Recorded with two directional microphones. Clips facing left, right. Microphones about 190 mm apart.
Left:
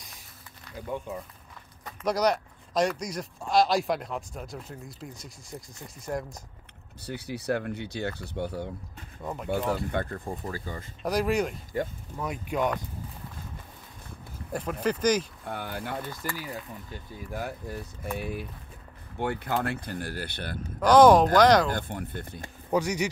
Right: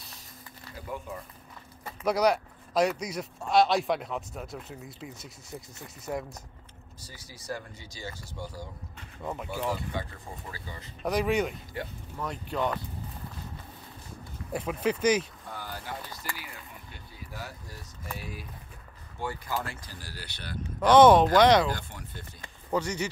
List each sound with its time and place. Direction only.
1.9 s speech: 5° right (ahead or behind)
7.0 s speech: 65° left (ahead or behind)
9.2 s speech: centre (ahead or behind)
9.8 s speech: 55° left (ahead or behind)
11.1 s speech: centre (ahead or behind)
11.7 s speech: 45° left (ahead or behind)
12.2 s speech: 10° left (ahead or behind)
14.5 s speech: centre (ahead or behind)
15.5 s speech: 60° left (ahead or behind)
16.3 s speech: 40° left (ahead or behind)
20.8 s speech: 5° right (ahead or behind)
21.6 s speech: 55° left (ahead or behind)
22.7 s speech: 10° left (ahead or behind)